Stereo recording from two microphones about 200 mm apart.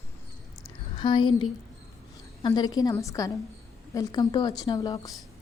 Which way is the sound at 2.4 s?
20° left (ahead or behind).